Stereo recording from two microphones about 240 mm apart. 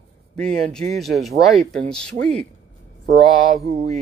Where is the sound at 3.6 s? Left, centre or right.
Right.